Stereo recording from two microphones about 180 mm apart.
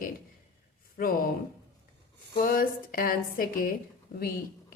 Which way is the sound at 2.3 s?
55° left (ahead or behind).